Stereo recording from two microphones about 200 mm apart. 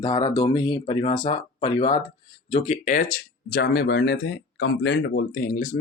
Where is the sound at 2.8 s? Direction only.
40° left (ahead or behind).